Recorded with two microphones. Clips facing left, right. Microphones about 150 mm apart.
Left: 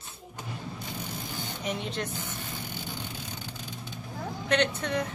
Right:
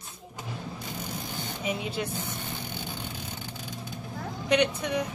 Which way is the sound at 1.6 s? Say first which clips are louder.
Right 2 dB; 5° right (ahead or behind).